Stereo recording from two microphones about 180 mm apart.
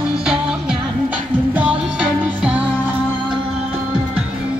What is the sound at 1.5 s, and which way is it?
Music, 5° right (ahead or behind).